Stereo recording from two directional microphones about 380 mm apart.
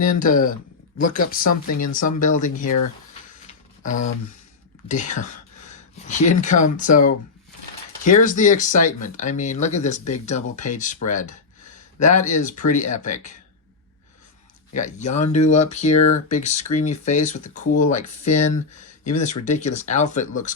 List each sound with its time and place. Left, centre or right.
0.1 s speech: left
1.6 s speech: left
2.0 s speech: left
3.4 s music: centre
4.9 s speech: centre
14.7 s speech: centre